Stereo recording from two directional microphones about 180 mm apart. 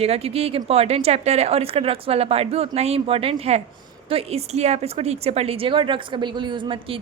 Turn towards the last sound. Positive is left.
turn(degrees=-30)  # may be behind; listen again after turning